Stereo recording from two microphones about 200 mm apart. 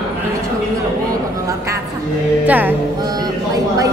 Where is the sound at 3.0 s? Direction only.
20° right (ahead or behind).